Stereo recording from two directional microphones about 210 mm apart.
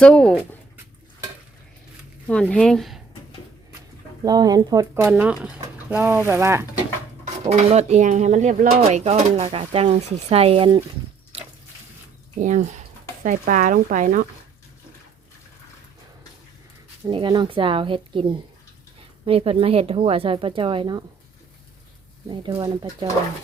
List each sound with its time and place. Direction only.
0.0 s speech: 5° left (ahead or behind)
2.2 s speech: 5° left (ahead or behind)
4.2 s speech: 20° right (ahead or behind)
7.4 s speech: 30° right (ahead or behind)
12.4 s speech: 35° right (ahead or behind)
17.1 s speech: 20° right (ahead or behind)
22.3 s speech: 20° right (ahead or behind)